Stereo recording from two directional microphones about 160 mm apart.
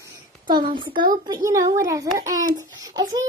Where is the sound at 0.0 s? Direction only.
30° right (ahead or behind).